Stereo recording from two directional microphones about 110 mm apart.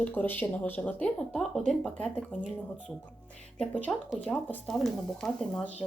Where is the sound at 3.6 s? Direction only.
15° left (ahead or behind).